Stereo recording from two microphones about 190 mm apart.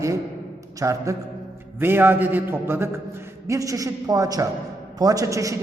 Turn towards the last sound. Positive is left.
turn(degrees=-15)  # may be behind; listen again after turning